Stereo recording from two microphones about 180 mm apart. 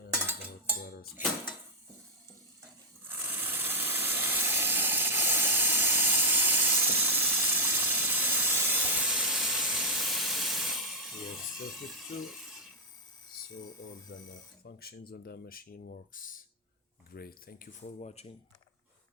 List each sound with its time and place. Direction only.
0.9 s dishes: 60° left (ahead or behind)
1.1 s dishes: centre (ahead or behind)
3.0 s steam: 10° right (ahead or behind)
14.6 s speech: 60° left (ahead or behind); by 18.3 s 40° left (ahead or behind)